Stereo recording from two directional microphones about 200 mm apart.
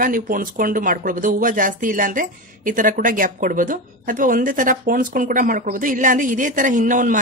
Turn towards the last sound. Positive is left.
turn(degrees=-40)  # may be behind; listen again after turning